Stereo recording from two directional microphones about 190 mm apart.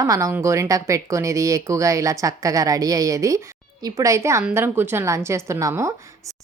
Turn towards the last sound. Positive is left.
turn(degrees=-15)  # may be behind; listen again after turning